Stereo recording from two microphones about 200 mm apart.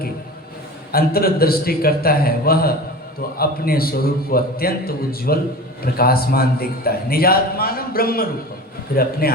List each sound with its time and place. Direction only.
0.9 s a man's voice: 50° left (ahead or behind)